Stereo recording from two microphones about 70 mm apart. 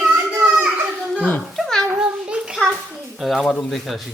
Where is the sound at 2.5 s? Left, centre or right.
Centre.